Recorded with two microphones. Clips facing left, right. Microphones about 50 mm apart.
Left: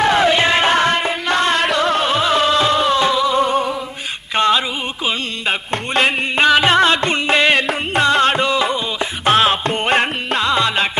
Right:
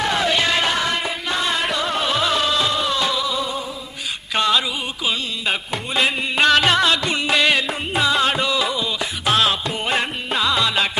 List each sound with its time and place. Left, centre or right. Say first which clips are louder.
0.0 s music: left 6 dB; left
1.3 s music: left 6 dB; left
2.0 s music: left 4 dB; left
2.5 s music: left 6 dB; left
3.2 s music: left 8 dB; left
4.4 s music: left 4 dB; left
5.7 s a sound: left 5 dB; left
6.3 s music: left 2 dB; centre
6.7 s music: left 4 dB; left
7.9 s music: left 4 dB; left
8.4 s music: left 4 dB; left
9.6 s music: left 6 dB; left
10.4 s music: left 2 dB; left